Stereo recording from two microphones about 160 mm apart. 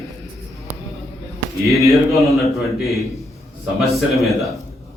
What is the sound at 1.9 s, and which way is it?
A man's voice, centre (ahead or behind).